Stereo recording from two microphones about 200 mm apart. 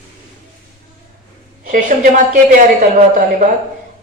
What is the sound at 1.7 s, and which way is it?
Speech, 40° right (ahead or behind).